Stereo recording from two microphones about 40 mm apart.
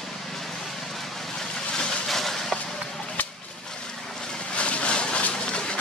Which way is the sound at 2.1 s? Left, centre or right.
Centre.